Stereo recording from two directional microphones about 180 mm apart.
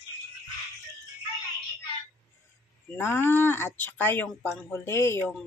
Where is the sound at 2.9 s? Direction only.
15° left (ahead or behind).